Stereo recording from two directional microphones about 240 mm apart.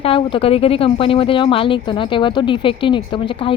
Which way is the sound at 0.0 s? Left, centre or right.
Left.